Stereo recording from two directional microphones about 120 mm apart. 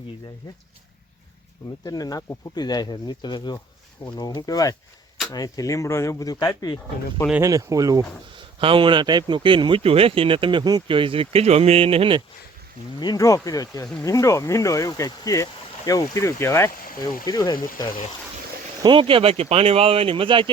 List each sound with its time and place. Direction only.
1.8 s speech: 30° left (ahead or behind)
7.4 s speech: 30° right (ahead or behind)
8.4 s speech: 45° right (ahead or behind)
13.0 s speech: 30° left (ahead or behind)
18.8 s speech: 45° right (ahead or behind)